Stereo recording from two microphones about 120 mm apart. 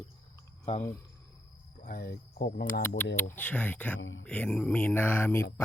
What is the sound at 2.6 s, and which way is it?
Speech, 15° left (ahead or behind).